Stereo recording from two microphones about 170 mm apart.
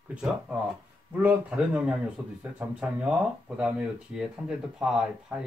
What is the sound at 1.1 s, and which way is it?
Speech, 5° right (ahead or behind).